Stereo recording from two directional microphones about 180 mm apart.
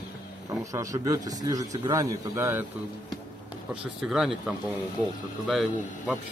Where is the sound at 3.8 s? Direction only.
5° right (ahead or behind).